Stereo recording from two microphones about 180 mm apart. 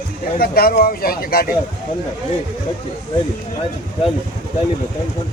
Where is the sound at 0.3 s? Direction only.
55° left (ahead or behind).